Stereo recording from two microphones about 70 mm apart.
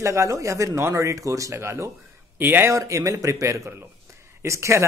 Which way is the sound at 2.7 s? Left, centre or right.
Right.